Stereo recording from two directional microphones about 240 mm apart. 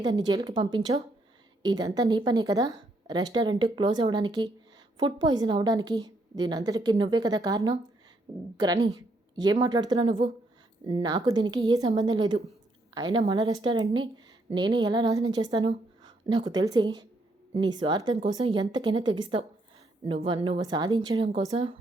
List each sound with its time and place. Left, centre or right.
0.0 s speech: centre